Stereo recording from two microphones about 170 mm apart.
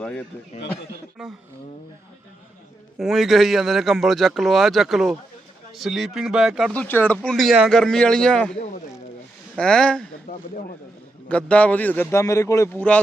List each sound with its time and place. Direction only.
0.0 s speech: 5° left (ahead or behind)
3.0 s speech: centre (ahead or behind)
6.8 s speech: 10° left (ahead or behind)
9.6 s speech: 5° left (ahead or behind)
10.3 s speech: 55° left (ahead or behind)
11.3 s a man's voice: 5° left (ahead or behind)